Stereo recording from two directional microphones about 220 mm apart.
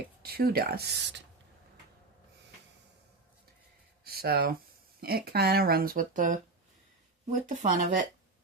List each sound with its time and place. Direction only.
0.2 s speech: 45° right (ahead or behind)
4.0 s a sound: 45° right (ahead or behind)
4.9 s speech: 45° right (ahead or behind)